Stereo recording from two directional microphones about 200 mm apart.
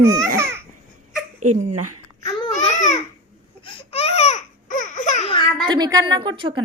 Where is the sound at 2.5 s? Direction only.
35° left (ahead or behind).